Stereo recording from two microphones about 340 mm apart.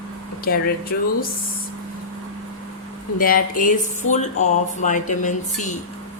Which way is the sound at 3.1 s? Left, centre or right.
Left.